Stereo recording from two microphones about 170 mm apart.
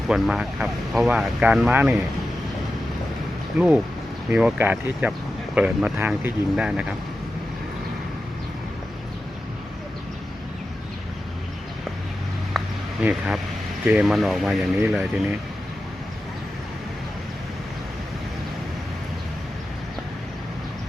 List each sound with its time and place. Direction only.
0.1 s speech: 5° right (ahead or behind)
4.3 s speech: 10° right (ahead or behind)
12.5 s a sound: 5° right (ahead or behind)
13.8 s speech: 5° right (ahead or behind)